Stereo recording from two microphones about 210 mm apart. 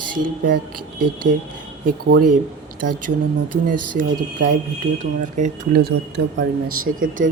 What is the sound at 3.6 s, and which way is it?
Speech, 40° right (ahead or behind).